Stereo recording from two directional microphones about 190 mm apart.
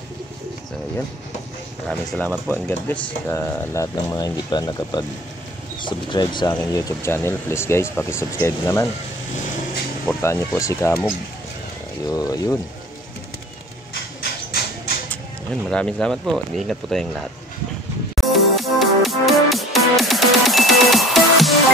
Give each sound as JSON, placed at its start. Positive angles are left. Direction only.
{"t": 1.9, "sound": "speech", "side_deg": 5}
{"t": 10.0, "sound": "speech", "side_deg": 15}
{"t": 15.6, "sound": "speech", "side_deg": 5}
{"t": 18.1, "sound": "music", "side_deg": 0}